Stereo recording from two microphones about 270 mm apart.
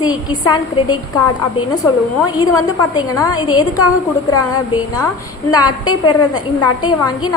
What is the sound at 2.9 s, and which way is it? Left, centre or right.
Speech, centre.